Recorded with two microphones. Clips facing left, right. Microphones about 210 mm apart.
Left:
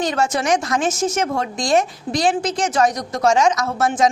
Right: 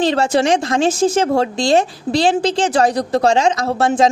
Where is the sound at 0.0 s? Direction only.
30° right (ahead or behind).